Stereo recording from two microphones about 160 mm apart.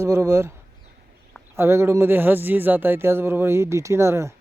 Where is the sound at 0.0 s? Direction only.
20° right (ahead or behind).